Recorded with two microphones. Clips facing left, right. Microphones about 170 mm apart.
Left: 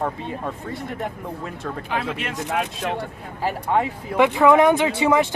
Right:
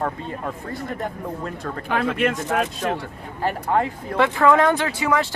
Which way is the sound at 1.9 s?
50° right (ahead or behind).